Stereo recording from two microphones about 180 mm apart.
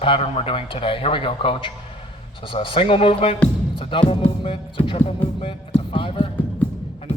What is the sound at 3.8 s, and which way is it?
Music, 30° left (ahead or behind).